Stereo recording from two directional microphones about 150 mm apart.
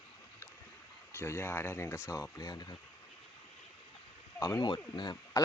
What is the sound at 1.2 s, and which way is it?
Speech, 15° left (ahead or behind).